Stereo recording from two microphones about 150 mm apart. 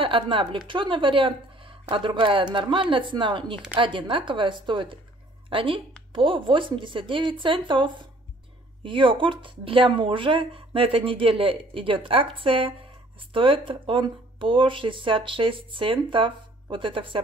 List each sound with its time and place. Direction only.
0.0 s speech: 35° right (ahead or behind)